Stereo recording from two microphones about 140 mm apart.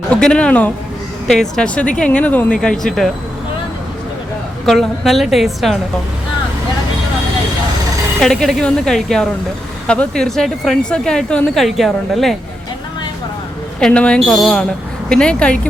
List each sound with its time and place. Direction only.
0.1 s a woman's voice: 5° left (ahead or behind)
4.6 s a woman's voice: centre (ahead or behind)
8.2 s a woman's voice: centre (ahead or behind)
13.7 s a woman's voice: 5° left (ahead or behind)